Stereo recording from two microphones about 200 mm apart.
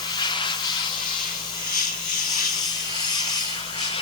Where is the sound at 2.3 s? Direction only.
20° left (ahead or behind).